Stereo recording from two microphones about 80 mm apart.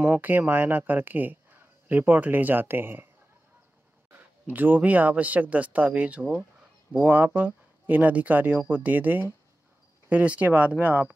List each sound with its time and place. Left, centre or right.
0.1 s speech: right
4.5 s speech: right